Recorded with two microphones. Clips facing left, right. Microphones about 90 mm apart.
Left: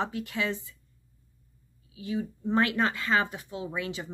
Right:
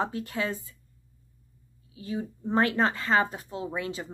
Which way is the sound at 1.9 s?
35° right (ahead or behind).